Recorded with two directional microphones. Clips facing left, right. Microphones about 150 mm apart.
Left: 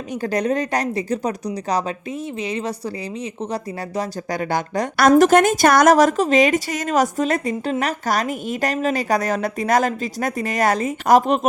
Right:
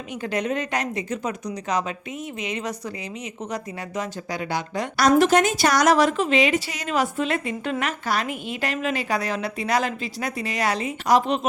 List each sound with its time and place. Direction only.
0.1 s speech: 40° left (ahead or behind)
4.4 s speech: 50° left (ahead or behind)